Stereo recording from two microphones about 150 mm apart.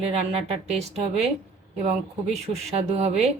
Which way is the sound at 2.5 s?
45° right (ahead or behind).